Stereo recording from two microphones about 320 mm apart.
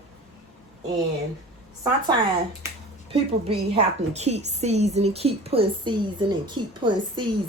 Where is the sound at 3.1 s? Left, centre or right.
Centre.